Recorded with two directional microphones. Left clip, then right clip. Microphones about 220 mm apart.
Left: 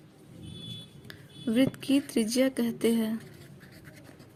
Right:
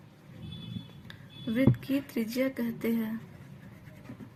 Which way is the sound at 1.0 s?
35° left (ahead or behind).